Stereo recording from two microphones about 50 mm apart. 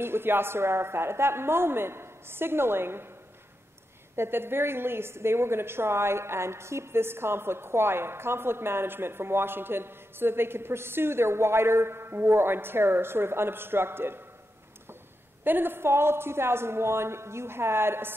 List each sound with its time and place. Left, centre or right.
0.0 s a woman's voice: right
4.2 s a woman's voice: right
15.4 s a woman's voice: right